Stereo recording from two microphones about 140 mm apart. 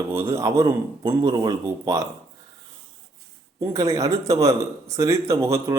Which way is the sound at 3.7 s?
25° right (ahead or behind).